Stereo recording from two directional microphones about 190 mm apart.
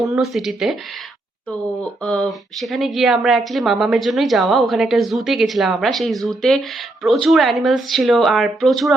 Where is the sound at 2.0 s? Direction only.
5° left (ahead or behind).